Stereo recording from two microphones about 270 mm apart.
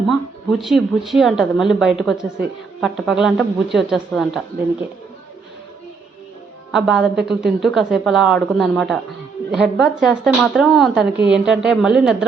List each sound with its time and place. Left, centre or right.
0.1 s speech: centre
6.7 s speech: centre